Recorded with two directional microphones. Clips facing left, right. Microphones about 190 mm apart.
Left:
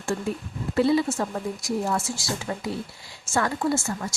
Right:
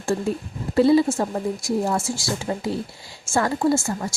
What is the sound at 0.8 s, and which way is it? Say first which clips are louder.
Speech: right 5 dB; 35° right (ahead or behind).